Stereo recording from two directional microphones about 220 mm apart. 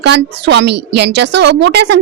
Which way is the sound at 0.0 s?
50° right (ahead or behind).